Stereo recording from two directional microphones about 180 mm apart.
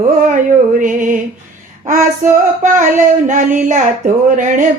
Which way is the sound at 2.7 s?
45° right (ahead or behind).